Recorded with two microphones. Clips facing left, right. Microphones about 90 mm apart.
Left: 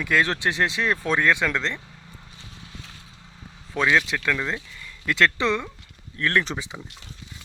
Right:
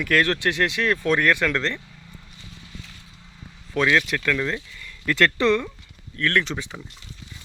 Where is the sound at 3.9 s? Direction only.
10° left (ahead or behind).